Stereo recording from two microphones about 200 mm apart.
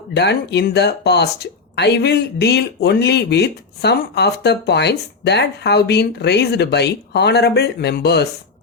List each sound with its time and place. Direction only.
0.1 s speech: 60° left (ahead or behind)